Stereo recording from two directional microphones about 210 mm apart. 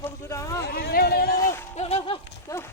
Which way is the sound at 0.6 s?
45° left (ahead or behind).